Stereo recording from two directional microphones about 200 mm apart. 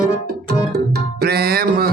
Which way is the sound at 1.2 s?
50° right (ahead or behind).